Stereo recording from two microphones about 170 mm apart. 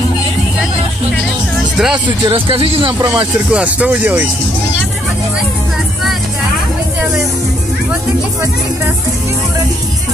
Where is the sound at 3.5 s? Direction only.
5° right (ahead or behind).